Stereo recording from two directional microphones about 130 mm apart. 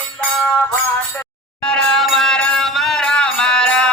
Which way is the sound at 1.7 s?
5° left (ahead or behind).